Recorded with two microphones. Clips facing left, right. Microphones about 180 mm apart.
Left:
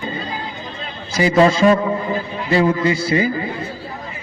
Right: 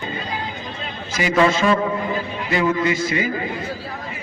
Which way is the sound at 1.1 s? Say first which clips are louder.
Left 4 dB; 35° left (ahead or behind).